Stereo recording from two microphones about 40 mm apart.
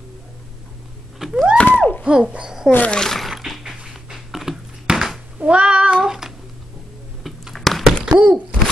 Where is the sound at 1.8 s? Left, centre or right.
Left.